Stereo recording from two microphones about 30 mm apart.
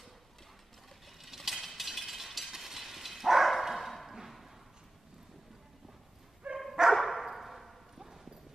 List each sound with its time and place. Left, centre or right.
1.2 s vehicle: centre
6.4 s bow-wow: right
6.9 s dog: centre